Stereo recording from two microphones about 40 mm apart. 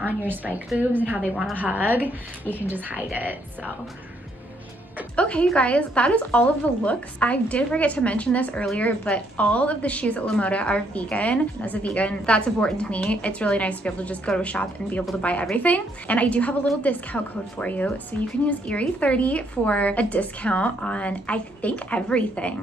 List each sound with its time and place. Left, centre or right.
0.0 s a woman's voice: right
5.1 s a woman's voice: left
12.9 s a woman's voice: left